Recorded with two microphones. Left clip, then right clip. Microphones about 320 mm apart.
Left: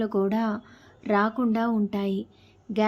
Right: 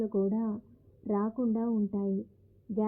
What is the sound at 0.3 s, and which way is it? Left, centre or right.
Speech, centre.